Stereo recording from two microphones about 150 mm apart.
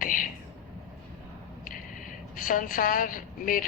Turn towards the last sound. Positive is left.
turn(degrees=65)  # may be behind; listen again after turning